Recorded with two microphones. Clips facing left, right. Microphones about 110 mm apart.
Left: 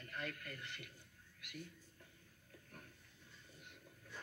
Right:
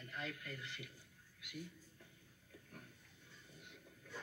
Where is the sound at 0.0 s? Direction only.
15° right (ahead or behind).